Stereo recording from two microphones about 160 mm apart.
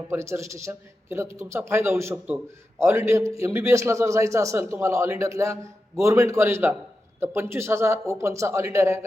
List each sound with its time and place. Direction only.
0.1 s a man's voice: 15° right (ahead or behind)